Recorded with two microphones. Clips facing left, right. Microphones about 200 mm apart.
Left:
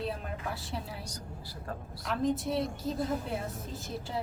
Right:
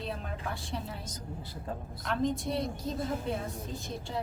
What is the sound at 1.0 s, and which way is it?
Speech, 20° right (ahead or behind).